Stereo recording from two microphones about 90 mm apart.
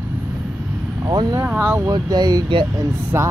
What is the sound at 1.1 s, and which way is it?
Speech, 50° right (ahead or behind).